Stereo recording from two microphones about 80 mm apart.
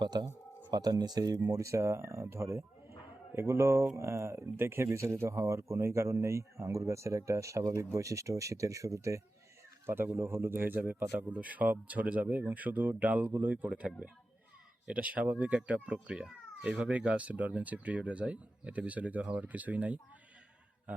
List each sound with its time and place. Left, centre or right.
0.0 s speech: right
1.5 s speech: right
9.8 s speech: right